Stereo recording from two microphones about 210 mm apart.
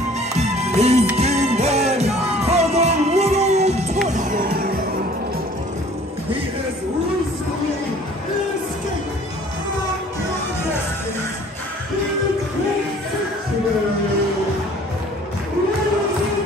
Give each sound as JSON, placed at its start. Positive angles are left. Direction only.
{"t": 0.4, "sound": "music", "side_deg": -30}